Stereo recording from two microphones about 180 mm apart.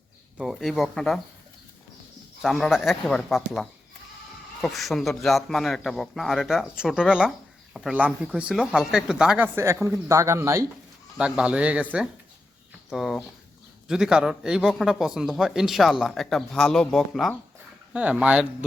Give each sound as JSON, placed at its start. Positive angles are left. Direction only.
{"t": 0.3, "sound": "speech", "side_deg": 0}
{"t": 2.4, "sound": "speech", "side_deg": 0}